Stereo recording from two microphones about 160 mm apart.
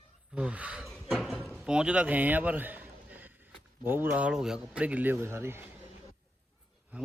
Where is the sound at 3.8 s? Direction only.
15° right (ahead or behind).